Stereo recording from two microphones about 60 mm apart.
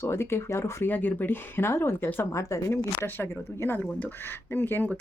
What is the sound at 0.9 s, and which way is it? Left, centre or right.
Speech, left.